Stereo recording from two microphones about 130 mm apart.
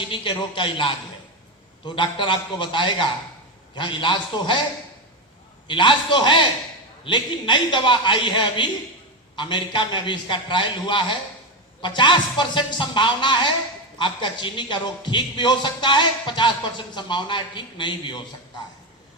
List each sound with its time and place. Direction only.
0.0 s speech: 40° left (ahead or behind)
5.6 s speech: 40° left (ahead or behind)